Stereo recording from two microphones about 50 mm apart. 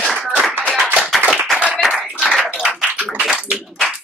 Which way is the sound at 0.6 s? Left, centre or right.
Left.